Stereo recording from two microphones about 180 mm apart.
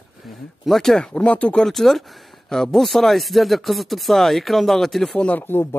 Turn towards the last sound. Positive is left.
turn(degrees=10)  # may be behind; listen again after turning